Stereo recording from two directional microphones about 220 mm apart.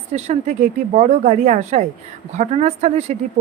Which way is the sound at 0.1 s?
30° right (ahead or behind).